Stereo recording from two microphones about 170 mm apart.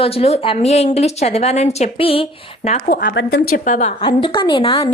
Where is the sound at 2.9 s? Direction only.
60° left (ahead or behind).